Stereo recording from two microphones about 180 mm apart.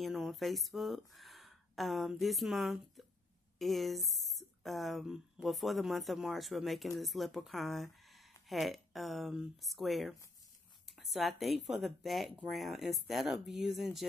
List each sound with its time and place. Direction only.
0.0 s speech: centre (ahead or behind)